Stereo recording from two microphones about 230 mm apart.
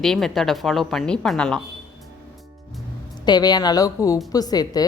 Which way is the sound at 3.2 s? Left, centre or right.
Centre.